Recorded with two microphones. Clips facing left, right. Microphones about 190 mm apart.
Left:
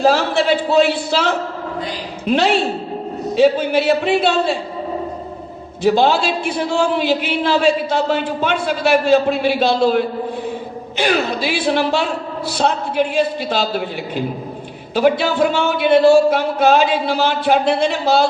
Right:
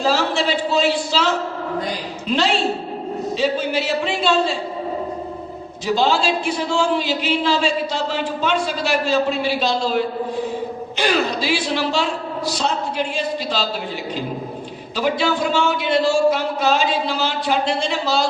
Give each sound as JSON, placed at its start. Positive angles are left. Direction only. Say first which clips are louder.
{"t": 0.0, "sound": "a man's voice", "louder": "left 4 dB", "side_deg": 60}
{"t": 5.8, "sound": "a man's voice", "louder": "left 4 dB", "side_deg": 55}
{"t": 11.1, "sound": "a man's voice", "louder": "left 1 dB", "side_deg": 55}